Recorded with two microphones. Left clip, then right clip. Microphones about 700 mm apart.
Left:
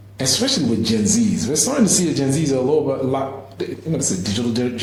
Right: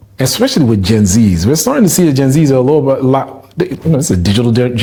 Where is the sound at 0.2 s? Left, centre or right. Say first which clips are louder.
Right 7 dB; right.